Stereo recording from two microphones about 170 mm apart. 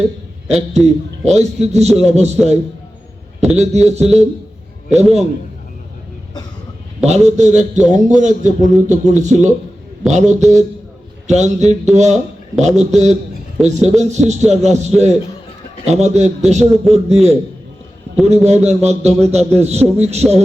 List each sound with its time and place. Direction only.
0.4 s a man's voice: 40° right (ahead or behind)
7.0 s a man's voice: 40° right (ahead or behind)
18.4 s a man's voice: 40° right (ahead or behind)